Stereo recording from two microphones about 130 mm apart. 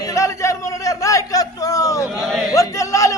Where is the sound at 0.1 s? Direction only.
25° left (ahead or behind).